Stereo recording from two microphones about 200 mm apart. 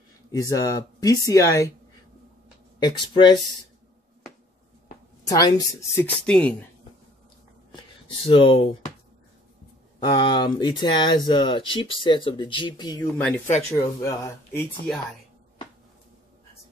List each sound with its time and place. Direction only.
0.3 s speech: 20° left (ahead or behind)
2.8 s speech: 20° left (ahead or behind)
5.2 s speech: 15° left (ahead or behind)
6.2 s speech: 5° left (ahead or behind)
8.3 s speech: 25° left (ahead or behind)
9.9 s speech: 20° left (ahead or behind)